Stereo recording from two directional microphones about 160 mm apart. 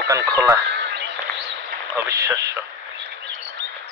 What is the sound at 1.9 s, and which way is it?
Speech, 20° right (ahead or behind).